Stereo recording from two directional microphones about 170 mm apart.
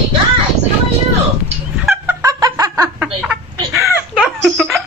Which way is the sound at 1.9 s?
15° right (ahead or behind).